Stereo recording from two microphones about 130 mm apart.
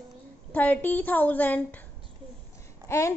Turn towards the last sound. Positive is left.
turn(degrees=20)  # may be behind; listen again after turning